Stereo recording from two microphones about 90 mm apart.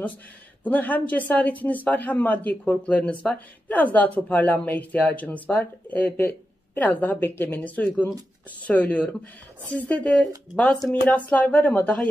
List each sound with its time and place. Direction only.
0.7 s speech: 20° left (ahead or behind)